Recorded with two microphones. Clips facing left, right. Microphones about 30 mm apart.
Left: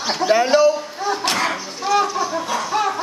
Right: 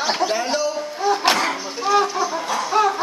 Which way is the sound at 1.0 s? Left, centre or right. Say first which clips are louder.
Right 2 dB; centre.